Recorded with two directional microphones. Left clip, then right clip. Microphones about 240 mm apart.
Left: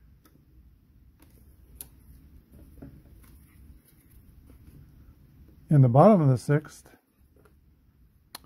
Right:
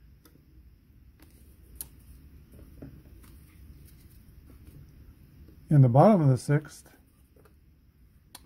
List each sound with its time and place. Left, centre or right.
5.7 s speech: centre